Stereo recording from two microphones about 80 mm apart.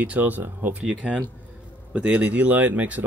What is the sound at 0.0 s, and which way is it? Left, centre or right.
Speech, centre.